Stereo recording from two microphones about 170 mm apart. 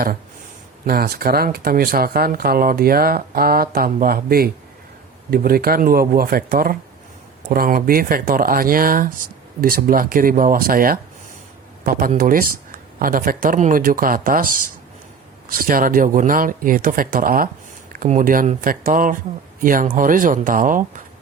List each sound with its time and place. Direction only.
0.9 s speech: 65° right (ahead or behind)